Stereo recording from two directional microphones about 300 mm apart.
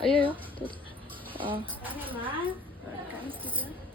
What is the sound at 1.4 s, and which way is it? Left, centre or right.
A woman's voice, centre.